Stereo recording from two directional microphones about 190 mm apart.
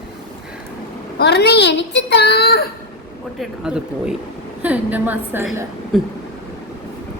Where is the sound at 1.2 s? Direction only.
60° left (ahead or behind).